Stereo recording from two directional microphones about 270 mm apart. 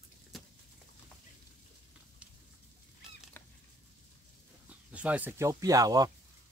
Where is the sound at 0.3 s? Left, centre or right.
Centre.